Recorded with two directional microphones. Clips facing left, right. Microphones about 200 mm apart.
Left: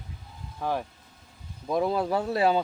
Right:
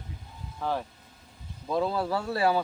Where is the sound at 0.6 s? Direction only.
15° left (ahead or behind).